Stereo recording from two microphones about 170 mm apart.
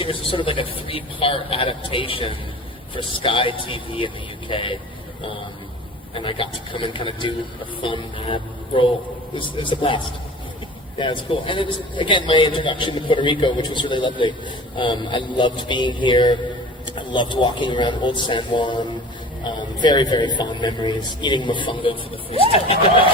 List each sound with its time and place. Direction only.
0.0 s a man's voice: 30° left (ahead or behind)
6.1 s a man's voice: 30° left (ahead or behind)